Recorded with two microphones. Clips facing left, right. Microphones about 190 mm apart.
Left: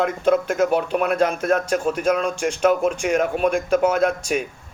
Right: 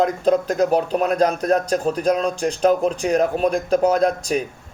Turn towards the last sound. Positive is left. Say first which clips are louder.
# right 1 dB
turn(degrees=-35)  # may be behind; listen again after turning